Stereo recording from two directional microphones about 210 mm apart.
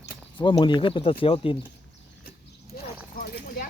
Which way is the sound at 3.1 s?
45° left (ahead or behind).